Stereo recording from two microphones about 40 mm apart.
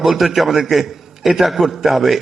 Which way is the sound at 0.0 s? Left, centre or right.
Centre.